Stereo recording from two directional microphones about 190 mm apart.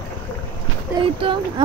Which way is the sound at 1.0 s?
25° right (ahead or behind).